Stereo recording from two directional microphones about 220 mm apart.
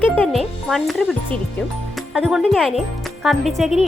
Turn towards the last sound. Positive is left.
turn(degrees=0)  # may be behind; listen again after turning